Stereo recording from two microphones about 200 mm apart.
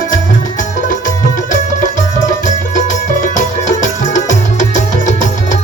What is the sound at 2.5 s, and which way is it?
Music, 40° left (ahead or behind).